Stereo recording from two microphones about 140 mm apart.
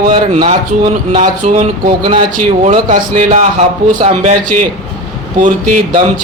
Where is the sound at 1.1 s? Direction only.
65° right (ahead or behind).